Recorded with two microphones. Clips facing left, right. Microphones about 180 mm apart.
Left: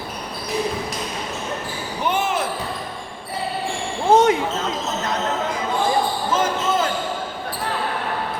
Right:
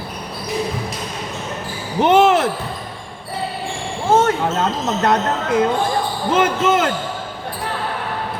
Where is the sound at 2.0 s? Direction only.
70° right (ahead or behind).